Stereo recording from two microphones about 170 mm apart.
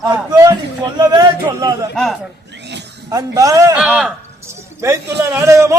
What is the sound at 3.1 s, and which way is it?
Speech, 20° right (ahead or behind).